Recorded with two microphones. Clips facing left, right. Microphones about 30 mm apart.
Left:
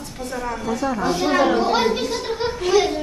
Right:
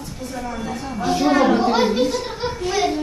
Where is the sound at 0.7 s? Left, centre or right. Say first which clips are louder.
Left 5 dB; left.